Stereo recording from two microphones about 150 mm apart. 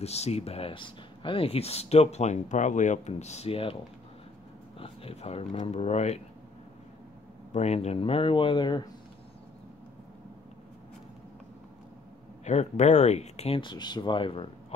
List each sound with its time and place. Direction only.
0.0 s speech: 45° left (ahead or behind)
4.7 s speech: 40° left (ahead or behind)
7.5 s speech: 45° left (ahead or behind); by 8.8 s 30° left (ahead or behind)
12.4 s speech: 50° left (ahead or behind); by 14.5 s 35° left (ahead or behind)